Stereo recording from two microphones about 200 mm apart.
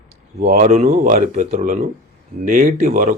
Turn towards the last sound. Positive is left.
turn(degrees=-45)  # may be behind; listen again after turning